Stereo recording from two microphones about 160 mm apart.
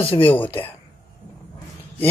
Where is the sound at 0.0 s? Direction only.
35° left (ahead or behind).